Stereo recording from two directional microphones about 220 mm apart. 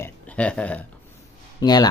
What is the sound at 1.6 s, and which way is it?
Speech, 15° left (ahead or behind).